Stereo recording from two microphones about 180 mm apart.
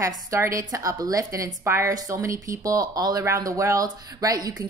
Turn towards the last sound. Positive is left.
turn(degrees=-20)  # may be behind; listen again after turning